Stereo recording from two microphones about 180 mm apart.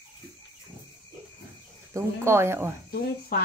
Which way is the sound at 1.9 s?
15° right (ahead or behind).